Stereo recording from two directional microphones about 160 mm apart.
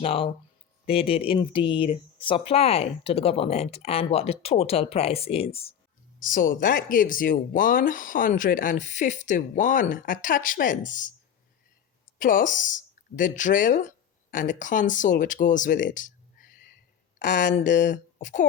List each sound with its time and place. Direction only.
0.0 s speech: 40° left (ahead or behind)
6.1 s speech: 55° left (ahead or behind)
12.2 s speech: 55° left (ahead or behind)